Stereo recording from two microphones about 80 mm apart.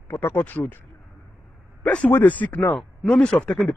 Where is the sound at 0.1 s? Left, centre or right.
Left.